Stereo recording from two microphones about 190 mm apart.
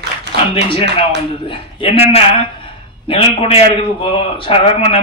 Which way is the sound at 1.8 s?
30° left (ahead or behind).